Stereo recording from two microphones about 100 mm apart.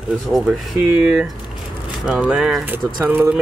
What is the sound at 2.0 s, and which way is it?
Speech, 10° right (ahead or behind).